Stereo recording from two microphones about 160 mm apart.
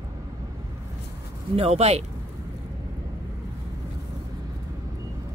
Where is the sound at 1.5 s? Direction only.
40° right (ahead or behind).